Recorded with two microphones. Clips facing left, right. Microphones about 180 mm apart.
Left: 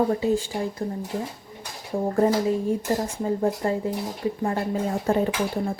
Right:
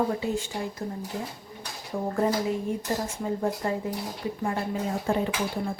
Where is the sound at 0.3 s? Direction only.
35° left (ahead or behind).